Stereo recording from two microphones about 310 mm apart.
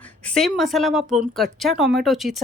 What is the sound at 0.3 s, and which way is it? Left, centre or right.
Speech, centre.